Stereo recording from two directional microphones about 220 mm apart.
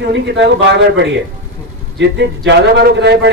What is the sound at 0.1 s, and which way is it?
A man's voice, 50° right (ahead or behind).